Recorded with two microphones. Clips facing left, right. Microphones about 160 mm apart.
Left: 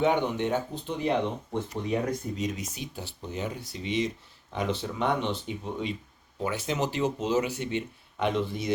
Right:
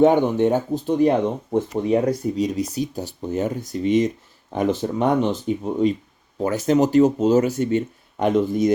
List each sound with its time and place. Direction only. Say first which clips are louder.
0.0 s speech: right 10 dB; 45° right (ahead or behind)